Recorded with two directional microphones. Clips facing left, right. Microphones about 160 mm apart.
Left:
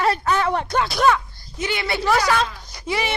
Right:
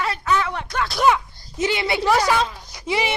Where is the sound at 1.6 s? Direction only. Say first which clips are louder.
Right 3 dB; 25° right (ahead or behind).